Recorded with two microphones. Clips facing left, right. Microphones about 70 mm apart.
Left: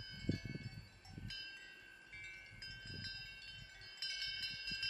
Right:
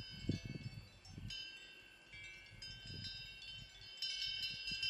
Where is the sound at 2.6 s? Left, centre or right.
Left.